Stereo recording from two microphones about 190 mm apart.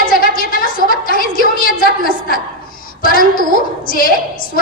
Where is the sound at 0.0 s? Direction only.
50° left (ahead or behind).